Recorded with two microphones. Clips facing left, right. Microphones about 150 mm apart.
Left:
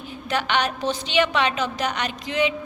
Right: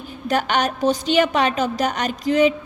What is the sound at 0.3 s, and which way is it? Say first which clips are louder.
A woman's voice: right 3 dB; 45° right (ahead or behind).